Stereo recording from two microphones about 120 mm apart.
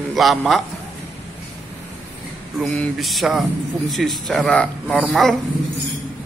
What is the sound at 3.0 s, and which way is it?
Speech, centre (ahead or behind).